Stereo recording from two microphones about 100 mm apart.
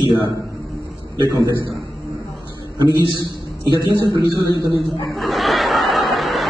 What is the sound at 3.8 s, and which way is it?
Speech, 45° right (ahead or behind).